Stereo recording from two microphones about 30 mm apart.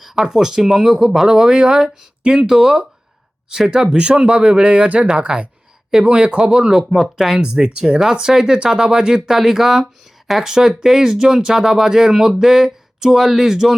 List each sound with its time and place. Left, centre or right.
0.2 s speech: centre
6.9 s speech: centre